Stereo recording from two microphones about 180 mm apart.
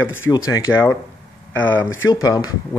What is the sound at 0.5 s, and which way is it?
Speech, 15° left (ahead or behind).